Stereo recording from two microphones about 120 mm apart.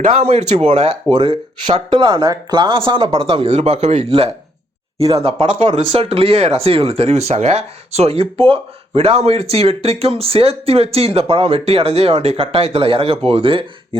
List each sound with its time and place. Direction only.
0.0 s speech: 65° right (ahead or behind)
1.1 s speech: 45° right (ahead or behind)